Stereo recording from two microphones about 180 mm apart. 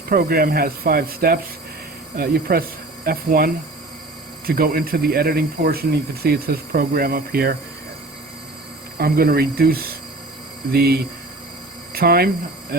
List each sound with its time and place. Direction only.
0.1 s speech: 55° right (ahead or behind)
9.0 s speech: 55° right (ahead or behind)